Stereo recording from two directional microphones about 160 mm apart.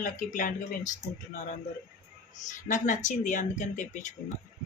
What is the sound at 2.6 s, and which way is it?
Speech, 55° left (ahead or behind).